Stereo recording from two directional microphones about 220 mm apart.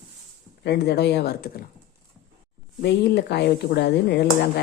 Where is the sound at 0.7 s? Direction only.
50° left (ahead or behind).